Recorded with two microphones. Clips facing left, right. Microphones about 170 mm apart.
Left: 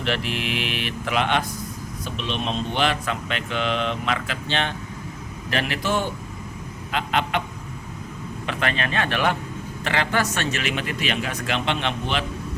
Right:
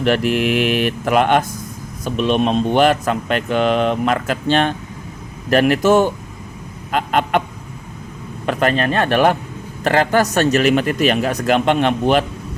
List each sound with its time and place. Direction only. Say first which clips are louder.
0.0 s speech: right 10 dB; 50° right (ahead or behind)
6.9 s a sound: right 7 dB; 45° right (ahead or behind)
8.4 s speech: right 9 dB; 45° right (ahead or behind)